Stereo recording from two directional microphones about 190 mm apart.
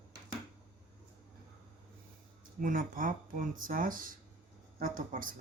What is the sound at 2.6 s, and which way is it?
Speech, 45° right (ahead or behind).